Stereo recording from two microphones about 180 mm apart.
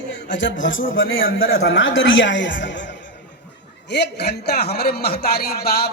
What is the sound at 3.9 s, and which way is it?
A man's voice, 70° left (ahead or behind).